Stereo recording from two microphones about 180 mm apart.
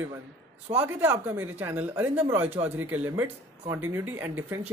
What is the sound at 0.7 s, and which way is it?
Speech, 10° right (ahead or behind).